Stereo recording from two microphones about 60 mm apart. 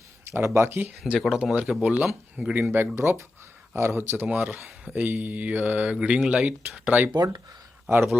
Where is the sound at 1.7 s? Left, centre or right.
Centre.